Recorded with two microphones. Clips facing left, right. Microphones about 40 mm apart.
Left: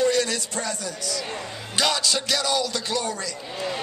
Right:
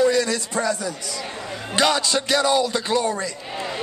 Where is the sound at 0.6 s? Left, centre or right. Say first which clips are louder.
Right 6 dB; centre.